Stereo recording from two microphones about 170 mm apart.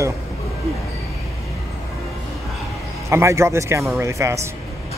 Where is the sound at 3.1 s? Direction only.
15° right (ahead or behind).